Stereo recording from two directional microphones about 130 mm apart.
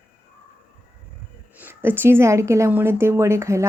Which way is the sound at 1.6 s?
15° right (ahead or behind).